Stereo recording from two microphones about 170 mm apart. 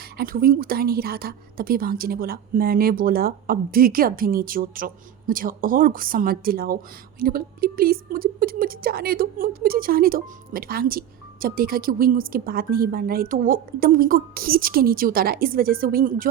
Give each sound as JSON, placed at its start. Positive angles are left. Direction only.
{"t": 0.2, "sound": "a woman's voice", "side_deg": -60}